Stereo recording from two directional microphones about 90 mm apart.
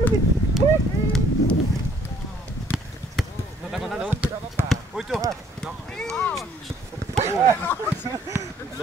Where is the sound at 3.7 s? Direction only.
5° right (ahead or behind).